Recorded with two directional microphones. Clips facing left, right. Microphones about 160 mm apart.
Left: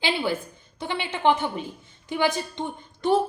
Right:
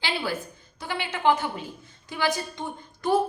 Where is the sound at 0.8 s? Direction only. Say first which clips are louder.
Left 2 dB; 25° left (ahead or behind).